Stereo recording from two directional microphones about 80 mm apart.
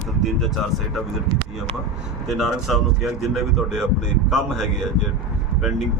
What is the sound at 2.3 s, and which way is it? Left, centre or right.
Speech, centre.